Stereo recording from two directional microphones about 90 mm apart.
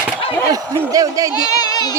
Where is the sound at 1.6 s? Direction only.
45° left (ahead or behind).